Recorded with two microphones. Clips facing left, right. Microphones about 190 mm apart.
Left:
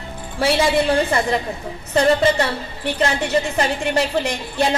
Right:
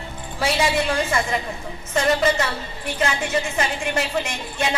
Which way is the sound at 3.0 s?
35° left (ahead or behind).